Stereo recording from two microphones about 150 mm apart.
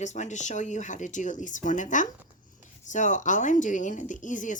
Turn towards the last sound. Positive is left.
turn(degrees=60)  # may be behind; listen again after turning